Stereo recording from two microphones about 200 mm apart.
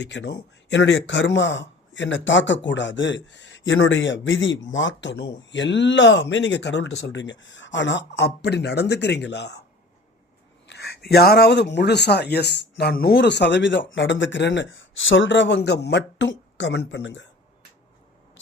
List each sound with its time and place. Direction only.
0.0 s a man's voice: 60° left (ahead or behind)
10.7 s a sound: 55° left (ahead or behind)
11.1 s a man's voice: 50° left (ahead or behind)